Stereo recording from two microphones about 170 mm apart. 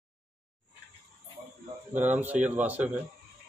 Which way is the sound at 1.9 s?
10° right (ahead or behind).